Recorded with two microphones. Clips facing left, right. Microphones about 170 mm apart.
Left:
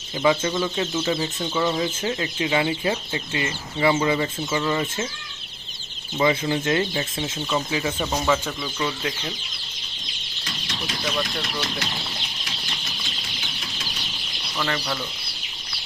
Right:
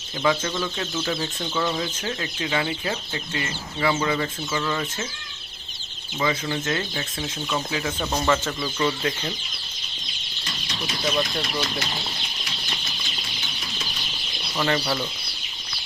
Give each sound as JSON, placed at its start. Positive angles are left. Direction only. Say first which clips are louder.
{"t": 0.2, "sound": "speech", "louder": "left 3 dB", "side_deg": 10}
{"t": 6.1, "sound": "speech", "louder": "left 4 dB", "side_deg": 20}
{"t": 7.5, "sound": "speech", "louder": "left 2 dB", "side_deg": 5}
{"t": 14.6, "sound": "speech", "louder": "right 3 dB", "side_deg": -10}